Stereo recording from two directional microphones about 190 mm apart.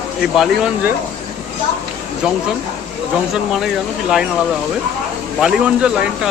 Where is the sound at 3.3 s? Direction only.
Centre (ahead or behind).